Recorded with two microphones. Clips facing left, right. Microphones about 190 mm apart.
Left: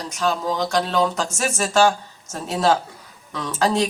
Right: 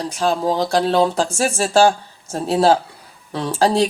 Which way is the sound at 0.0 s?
35° right (ahead or behind).